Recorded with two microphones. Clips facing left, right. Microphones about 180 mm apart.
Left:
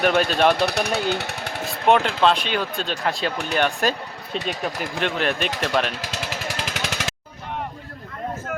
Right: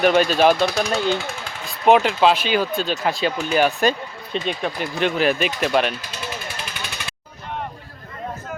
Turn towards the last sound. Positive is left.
turn(degrees=90)